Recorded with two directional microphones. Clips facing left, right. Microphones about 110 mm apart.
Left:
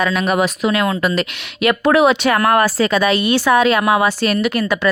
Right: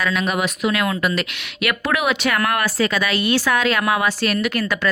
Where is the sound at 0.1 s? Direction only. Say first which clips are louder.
Left 5 dB; 40° left (ahead or behind).